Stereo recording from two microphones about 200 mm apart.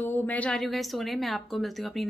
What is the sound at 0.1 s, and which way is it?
A woman's voice, 10° left (ahead or behind).